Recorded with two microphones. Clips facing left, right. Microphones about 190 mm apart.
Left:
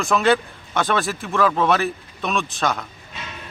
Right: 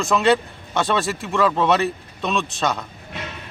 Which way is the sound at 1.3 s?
Centre (ahead or behind).